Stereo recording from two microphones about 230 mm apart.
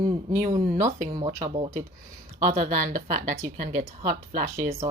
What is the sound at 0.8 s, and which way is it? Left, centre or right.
A woman's voice, right.